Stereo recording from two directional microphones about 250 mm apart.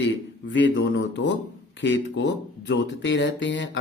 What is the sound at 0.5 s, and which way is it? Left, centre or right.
Speech, left.